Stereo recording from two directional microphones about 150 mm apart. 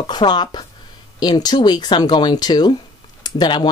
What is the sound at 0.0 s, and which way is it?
Speech, 30° left (ahead or behind).